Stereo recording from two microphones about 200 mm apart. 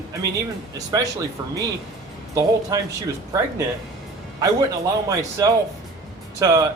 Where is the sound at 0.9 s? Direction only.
20° right (ahead or behind).